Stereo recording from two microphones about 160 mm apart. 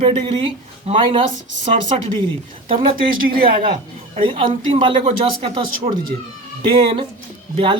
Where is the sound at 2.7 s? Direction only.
35° right (ahead or behind).